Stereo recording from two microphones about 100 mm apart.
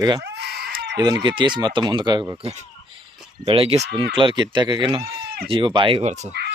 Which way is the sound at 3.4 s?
70° right (ahead or behind).